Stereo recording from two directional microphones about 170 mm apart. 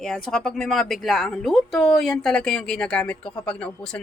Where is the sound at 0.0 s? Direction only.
Centre (ahead or behind).